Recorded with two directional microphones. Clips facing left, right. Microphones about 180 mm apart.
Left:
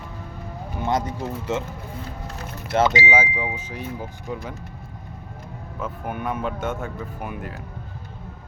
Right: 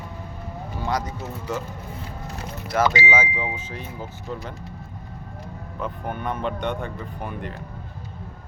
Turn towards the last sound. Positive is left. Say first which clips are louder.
# even
turn(degrees=5)  # may be behind; listen again after turning